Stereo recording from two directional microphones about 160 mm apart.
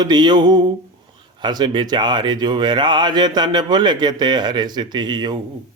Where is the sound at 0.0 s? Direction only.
25° right (ahead or behind).